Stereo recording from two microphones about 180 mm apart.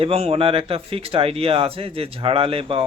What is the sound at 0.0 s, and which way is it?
Speech, 35° right (ahead or behind).